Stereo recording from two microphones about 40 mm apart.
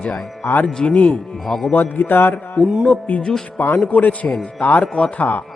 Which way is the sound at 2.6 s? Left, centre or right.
Left.